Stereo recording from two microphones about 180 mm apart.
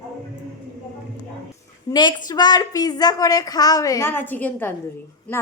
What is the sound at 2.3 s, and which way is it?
A woman's voice, 20° left (ahead or behind).